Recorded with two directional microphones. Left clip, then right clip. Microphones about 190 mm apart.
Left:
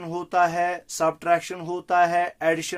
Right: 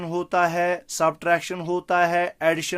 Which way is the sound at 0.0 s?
45° right (ahead or behind).